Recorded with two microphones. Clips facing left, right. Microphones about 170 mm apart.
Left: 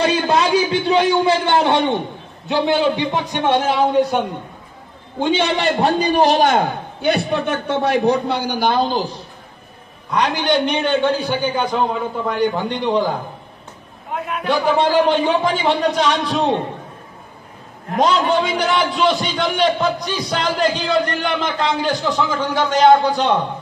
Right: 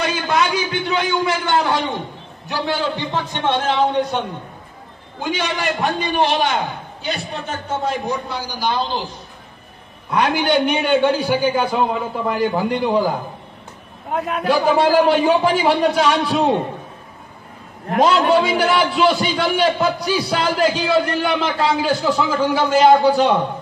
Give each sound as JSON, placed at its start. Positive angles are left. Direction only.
{"t": 0.0, "sound": "a man's voice", "side_deg": 30}
{"t": 5.2, "sound": "a man's voice", "side_deg": 30}
{"t": 10.1, "sound": "a man's voice", "side_deg": -10}
{"t": 14.2, "sound": "a man's voice", "side_deg": -35}
{"t": 14.8, "sound": "a man's voice", "side_deg": -10}
{"t": 18.0, "sound": "a man's voice", "side_deg": -5}